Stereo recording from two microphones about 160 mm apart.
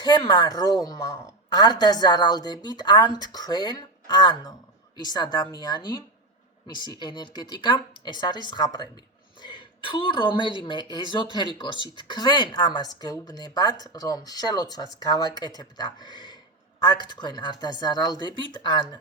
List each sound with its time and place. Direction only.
0.0 s speech: 25° left (ahead or behind)